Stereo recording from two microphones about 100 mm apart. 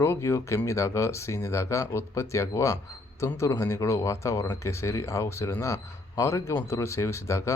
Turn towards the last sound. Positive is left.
turn(degrees=30)  # may be behind; listen again after turning